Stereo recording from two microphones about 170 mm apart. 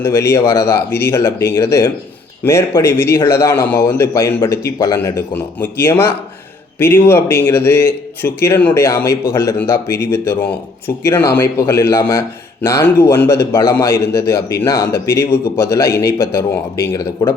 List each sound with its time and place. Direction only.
0.0 s speech: 15° left (ahead or behind)